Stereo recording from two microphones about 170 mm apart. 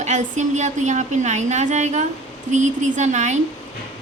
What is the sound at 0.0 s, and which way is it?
A woman's voice, 45° right (ahead or behind).